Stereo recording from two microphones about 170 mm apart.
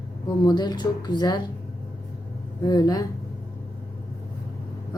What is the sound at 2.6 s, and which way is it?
Speech, 25° left (ahead or behind).